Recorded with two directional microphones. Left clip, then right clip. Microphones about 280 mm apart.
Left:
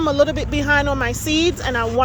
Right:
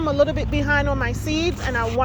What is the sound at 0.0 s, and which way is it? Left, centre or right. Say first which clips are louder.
Speech: left 3 dB; left.